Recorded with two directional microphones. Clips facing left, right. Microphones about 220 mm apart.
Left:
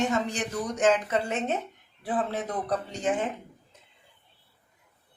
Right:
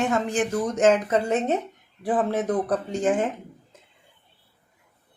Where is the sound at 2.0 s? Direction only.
50° right (ahead or behind).